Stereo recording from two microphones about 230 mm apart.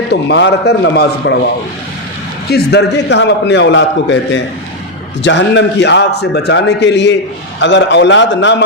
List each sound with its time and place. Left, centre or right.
0.1 s a man's voice: left
2.5 s a man's voice: left